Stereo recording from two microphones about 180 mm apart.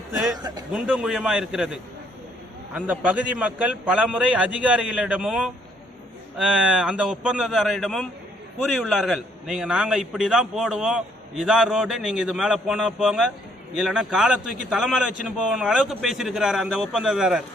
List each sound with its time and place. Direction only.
0.1 s a man's voice: 5° right (ahead or behind)
0.3 s a man's voice: 20° right (ahead or behind)
0.7 s a man's voice: 5° right (ahead or behind)